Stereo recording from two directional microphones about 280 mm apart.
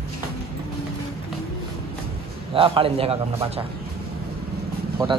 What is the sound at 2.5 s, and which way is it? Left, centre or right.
A man's voice, centre.